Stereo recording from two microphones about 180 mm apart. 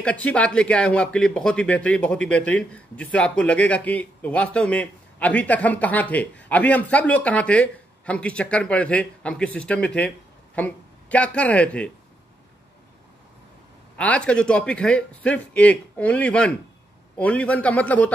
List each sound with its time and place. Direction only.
0.0 s speech: 5° left (ahead or behind)
13.9 s speech: 5° left (ahead or behind)